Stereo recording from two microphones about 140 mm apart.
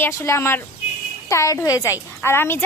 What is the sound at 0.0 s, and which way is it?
A woman's voice, 20° left (ahead or behind).